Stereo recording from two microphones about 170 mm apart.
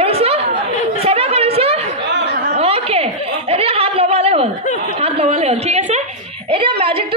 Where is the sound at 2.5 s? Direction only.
35° right (ahead or behind).